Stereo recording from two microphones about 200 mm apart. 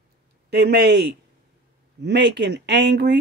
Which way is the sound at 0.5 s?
55° right (ahead or behind).